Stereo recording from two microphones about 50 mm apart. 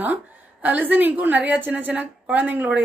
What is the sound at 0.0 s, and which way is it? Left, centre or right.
A woman's voice, right.